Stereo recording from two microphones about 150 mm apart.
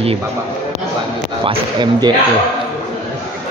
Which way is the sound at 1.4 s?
30° right (ahead or behind).